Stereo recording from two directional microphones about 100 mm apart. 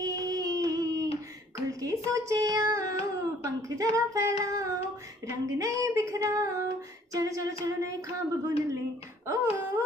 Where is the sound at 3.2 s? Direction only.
35° right (ahead or behind).